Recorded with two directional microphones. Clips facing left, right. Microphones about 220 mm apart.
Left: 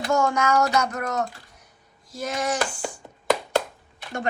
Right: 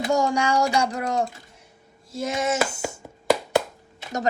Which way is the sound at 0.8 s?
30° right (ahead or behind).